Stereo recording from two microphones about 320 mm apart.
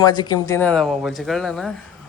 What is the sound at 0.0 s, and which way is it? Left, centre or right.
Speech, centre.